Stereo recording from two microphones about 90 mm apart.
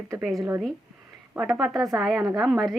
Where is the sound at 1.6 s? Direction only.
Centre (ahead or behind).